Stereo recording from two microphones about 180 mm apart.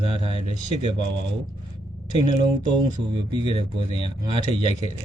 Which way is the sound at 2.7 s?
25° right (ahead or behind).